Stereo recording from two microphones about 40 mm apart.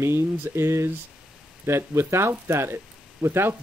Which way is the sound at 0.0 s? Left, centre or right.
Right.